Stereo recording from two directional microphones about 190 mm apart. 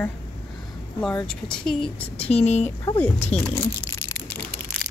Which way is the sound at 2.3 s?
35° left (ahead or behind).